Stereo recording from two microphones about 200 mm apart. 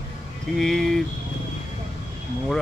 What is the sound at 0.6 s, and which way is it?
Speech, centre (ahead or behind).